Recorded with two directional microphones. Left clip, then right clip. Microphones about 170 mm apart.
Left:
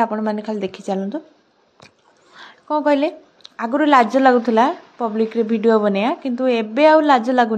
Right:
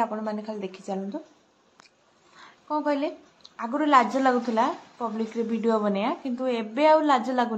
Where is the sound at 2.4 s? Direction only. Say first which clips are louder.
Left 9 dB; 40° left (ahead or behind).